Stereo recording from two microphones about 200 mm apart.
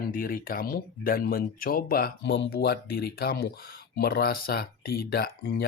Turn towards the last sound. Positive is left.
turn(degrees=50)  # may be behind; listen again after turning